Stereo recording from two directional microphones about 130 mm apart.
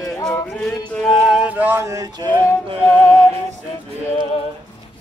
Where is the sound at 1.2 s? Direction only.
5° right (ahead or behind); by 2.2 s 25° right (ahead or behind).